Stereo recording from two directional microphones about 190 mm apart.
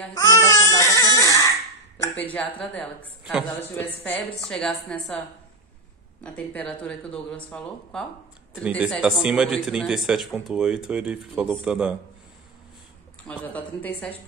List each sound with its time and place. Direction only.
0.1 s baby cry: 15° left (ahead or behind)
3.4 s speech: 10° left (ahead or behind)
6.2 s speech: 5° left (ahead or behind)
8.6 s speech: 5° right (ahead or behind)
13.3 s speech: 10° left (ahead or behind)